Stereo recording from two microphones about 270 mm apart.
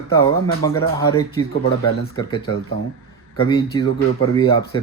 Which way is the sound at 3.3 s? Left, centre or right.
Centre.